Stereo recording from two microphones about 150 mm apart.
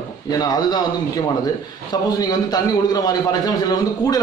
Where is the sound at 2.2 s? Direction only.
25° left (ahead or behind).